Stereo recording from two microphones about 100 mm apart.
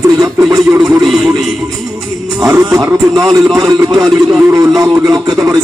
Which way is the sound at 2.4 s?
35° right (ahead or behind).